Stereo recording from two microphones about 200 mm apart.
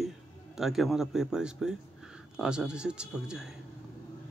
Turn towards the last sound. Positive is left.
turn(degrees=-5)  # may be behind; listen again after turning